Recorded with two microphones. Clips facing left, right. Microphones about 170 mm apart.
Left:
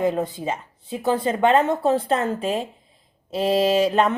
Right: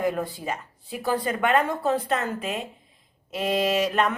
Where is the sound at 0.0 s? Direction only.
25° left (ahead or behind).